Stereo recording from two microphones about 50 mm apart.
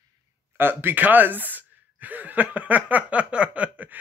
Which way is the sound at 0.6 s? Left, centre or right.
Right.